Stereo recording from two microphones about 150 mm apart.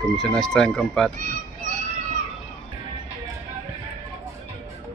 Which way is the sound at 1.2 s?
60° right (ahead or behind).